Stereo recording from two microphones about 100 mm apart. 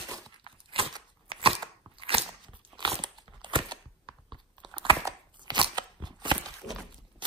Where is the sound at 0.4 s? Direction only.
60° right (ahead or behind).